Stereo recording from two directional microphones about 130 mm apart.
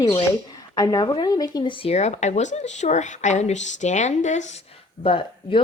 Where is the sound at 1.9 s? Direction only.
60° left (ahead or behind).